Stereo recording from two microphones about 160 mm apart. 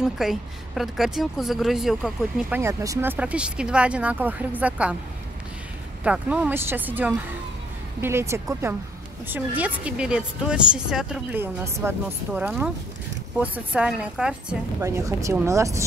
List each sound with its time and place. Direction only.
0.0 s speech: centre (ahead or behind)
2.6 s a woman's voice: 20° right (ahead or behind)
6.0 s a woman's voice: 10° right (ahead or behind)
14.8 s a woman's voice: 20° right (ahead or behind)